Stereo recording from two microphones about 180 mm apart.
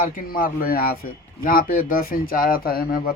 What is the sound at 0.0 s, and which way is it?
A man's voice, 50° left (ahead or behind).